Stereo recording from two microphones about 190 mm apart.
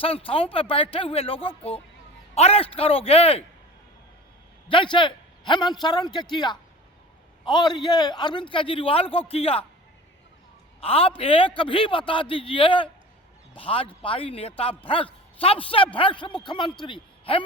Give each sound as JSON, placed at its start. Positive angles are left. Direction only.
{"t": 0.0, "sound": "a man's voice", "side_deg": 30}
{"t": 4.7, "sound": "a man's voice", "side_deg": 25}
{"t": 10.8, "sound": "a man's voice", "side_deg": 30}